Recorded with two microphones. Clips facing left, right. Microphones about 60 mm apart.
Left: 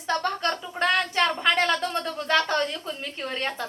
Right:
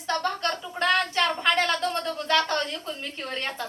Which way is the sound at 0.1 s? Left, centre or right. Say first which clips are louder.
Left 1 dB; centre.